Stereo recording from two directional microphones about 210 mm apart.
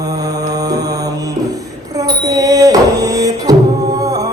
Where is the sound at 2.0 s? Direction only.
15° right (ahead or behind).